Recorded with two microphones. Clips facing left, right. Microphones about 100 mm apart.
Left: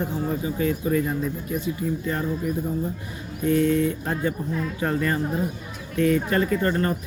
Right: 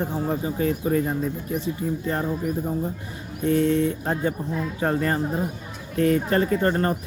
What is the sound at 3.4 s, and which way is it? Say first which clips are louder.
Speech: even; 30° right (ahead or behind).